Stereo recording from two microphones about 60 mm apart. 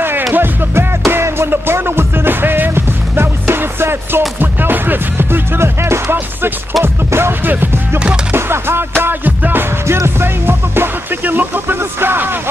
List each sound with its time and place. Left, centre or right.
0.3 s music: right
9.8 s music: right